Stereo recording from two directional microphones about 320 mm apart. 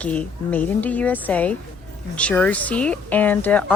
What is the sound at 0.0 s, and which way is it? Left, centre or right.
Speech, centre.